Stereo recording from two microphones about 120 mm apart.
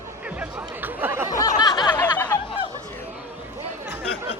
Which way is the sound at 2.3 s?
25° left (ahead or behind).